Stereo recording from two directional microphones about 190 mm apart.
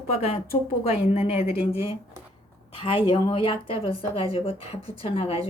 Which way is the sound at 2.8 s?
25° left (ahead or behind).